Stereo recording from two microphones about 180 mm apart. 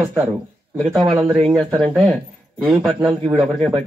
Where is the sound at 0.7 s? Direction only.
Centre (ahead or behind).